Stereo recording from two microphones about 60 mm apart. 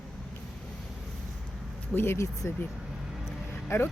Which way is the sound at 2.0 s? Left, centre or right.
Left.